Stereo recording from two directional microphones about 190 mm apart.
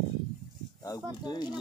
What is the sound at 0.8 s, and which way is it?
Speech, 20° left (ahead or behind).